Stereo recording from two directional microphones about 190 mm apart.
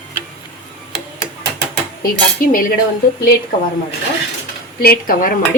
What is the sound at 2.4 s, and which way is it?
Speech, 50° left (ahead or behind).